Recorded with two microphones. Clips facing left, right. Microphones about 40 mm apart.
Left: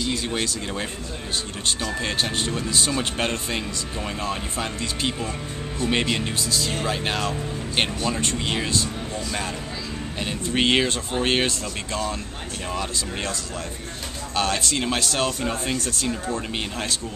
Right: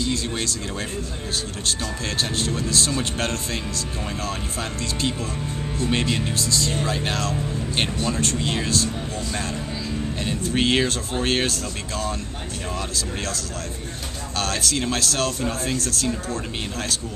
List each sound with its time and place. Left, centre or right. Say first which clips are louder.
0.1 s speech: even; centre
2.0 s speech: right 2 dB; centre
10.2 s speech: left 1 dB; centre